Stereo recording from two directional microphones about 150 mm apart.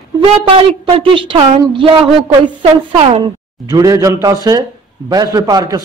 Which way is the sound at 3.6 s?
20° right (ahead or behind).